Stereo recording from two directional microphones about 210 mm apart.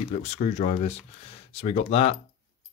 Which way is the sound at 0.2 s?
35° left (ahead or behind).